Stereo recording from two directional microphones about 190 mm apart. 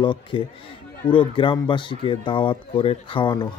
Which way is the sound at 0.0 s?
25° left (ahead or behind).